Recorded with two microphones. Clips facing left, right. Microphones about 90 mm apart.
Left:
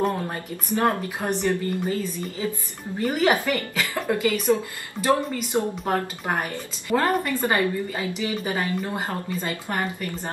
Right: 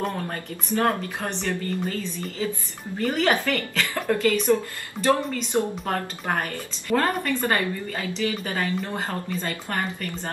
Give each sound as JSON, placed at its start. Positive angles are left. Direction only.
{"t": 0.3, "sound": "speech", "side_deg": 15}